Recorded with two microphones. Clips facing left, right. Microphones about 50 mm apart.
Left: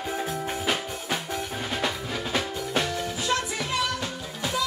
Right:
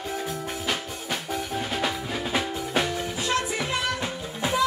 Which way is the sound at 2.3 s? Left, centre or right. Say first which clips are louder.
Right 1 dB; centre.